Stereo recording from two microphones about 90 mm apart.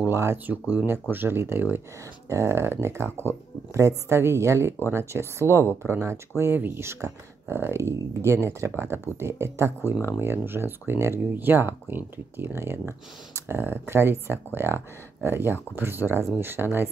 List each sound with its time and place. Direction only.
0.0 s speech: 30° right (ahead or behind)